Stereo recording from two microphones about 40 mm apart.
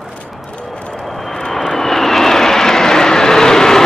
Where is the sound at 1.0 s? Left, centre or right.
Centre.